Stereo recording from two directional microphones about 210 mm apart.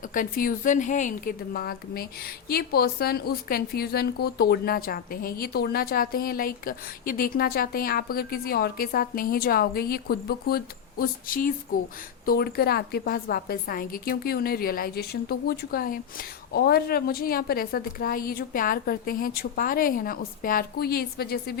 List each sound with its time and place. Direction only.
0.1 s a woman's voice: 40° left (ahead or behind)